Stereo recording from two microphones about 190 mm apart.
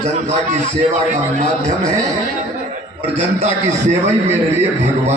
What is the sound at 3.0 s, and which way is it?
A man's voice, 35° right (ahead or behind).